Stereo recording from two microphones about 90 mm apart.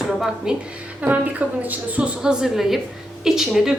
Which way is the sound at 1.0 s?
15° right (ahead or behind).